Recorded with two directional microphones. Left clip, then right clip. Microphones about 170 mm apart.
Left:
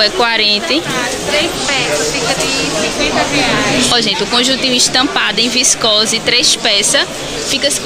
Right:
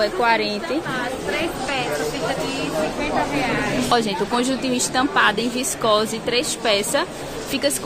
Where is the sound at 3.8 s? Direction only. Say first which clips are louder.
Left 7 dB; 25° right (ahead or behind).